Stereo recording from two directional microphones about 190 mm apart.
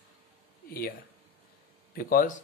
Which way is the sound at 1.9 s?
50° left (ahead or behind).